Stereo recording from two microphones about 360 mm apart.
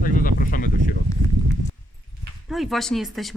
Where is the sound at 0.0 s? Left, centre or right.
Left.